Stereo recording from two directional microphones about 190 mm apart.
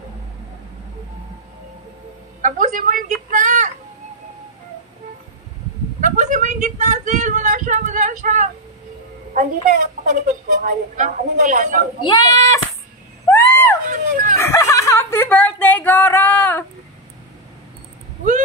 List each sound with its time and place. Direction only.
2.4 s a woman's voice: 45° right (ahead or behind)
3.3 s child singing: 40° right (ahead or behind)
5.9 s a sound: 40° right (ahead or behind)
9.3 s a woman's voice: 45° right (ahead or behind)
12.1 s speech: 20° left (ahead or behind)
13.3 s a sound: 15° left (ahead or behind)
13.8 s a woman's voice: 45° right (ahead or behind)
14.4 s speech: 15° left (ahead or behind)